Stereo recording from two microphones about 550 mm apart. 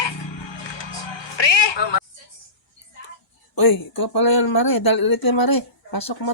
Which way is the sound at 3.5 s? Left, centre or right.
Left.